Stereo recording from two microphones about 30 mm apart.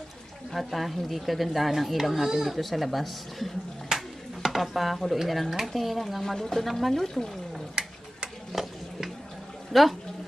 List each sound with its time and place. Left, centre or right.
0.5 s speech: centre
3.9 s a sound: right
4.5 s speech: centre
6.2 s speech: centre
8.6 s a sound: centre
9.7 s speech: centre